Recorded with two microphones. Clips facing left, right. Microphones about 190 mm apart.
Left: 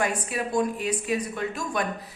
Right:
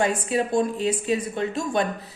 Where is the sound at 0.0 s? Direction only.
25° right (ahead or behind).